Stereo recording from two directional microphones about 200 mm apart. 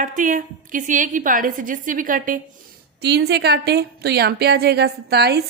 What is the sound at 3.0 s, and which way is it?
A woman's voice, 55° right (ahead or behind).